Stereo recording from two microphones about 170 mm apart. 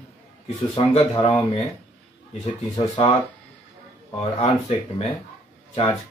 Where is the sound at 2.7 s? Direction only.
35° left (ahead or behind).